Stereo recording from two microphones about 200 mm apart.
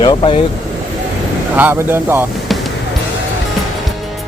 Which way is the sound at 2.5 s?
Centre (ahead or behind).